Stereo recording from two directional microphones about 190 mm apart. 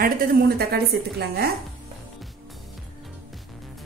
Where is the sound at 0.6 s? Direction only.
55° right (ahead or behind).